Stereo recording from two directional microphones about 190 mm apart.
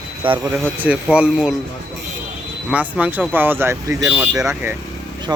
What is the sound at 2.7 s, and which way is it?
Speech, 10° right (ahead or behind).